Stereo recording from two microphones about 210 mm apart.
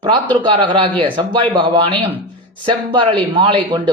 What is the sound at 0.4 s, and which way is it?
Speech, 25° right (ahead or behind).